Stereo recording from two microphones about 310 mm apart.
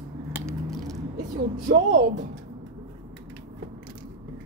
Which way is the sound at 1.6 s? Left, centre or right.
Right.